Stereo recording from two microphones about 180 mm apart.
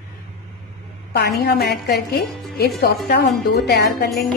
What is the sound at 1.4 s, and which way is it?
Speech, 60° left (ahead or behind).